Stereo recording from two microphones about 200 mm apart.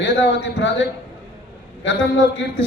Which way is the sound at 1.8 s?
70° left (ahead or behind).